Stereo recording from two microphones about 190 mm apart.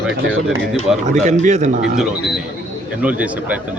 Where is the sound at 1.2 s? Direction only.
40° right (ahead or behind).